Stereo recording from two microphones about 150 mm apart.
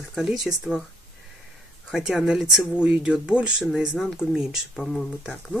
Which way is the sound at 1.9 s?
Centre (ahead or behind).